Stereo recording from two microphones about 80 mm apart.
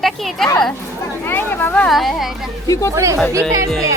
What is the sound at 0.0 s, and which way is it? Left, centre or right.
Speech, centre.